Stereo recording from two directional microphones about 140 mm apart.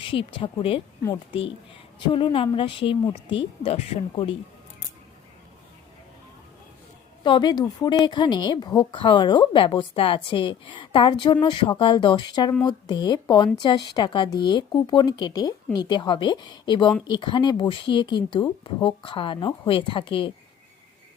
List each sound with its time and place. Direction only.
0.0 s a woman's voice: 35° left (ahead or behind)
2.0 s a woman's voice: 35° left (ahead or behind)
4.1 s a woman's voice: 40° left (ahead or behind)
7.3 s a woman's voice: 35° left (ahead or behind)